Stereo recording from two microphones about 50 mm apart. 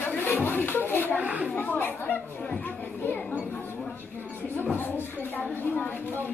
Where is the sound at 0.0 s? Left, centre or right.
Left.